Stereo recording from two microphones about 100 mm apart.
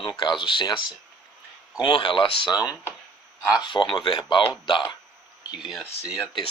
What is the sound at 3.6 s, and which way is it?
Speech, 55° left (ahead or behind).